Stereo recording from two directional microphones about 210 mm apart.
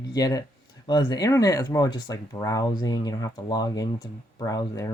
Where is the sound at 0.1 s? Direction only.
15° left (ahead or behind).